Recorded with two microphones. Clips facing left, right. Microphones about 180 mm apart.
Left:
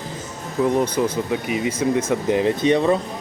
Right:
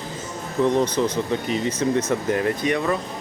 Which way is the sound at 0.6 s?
10° left (ahead or behind).